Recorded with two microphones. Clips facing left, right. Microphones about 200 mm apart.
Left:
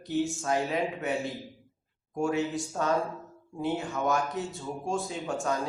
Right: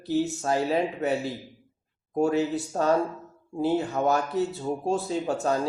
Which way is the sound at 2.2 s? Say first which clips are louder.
Right 5 dB; 35° right (ahead or behind).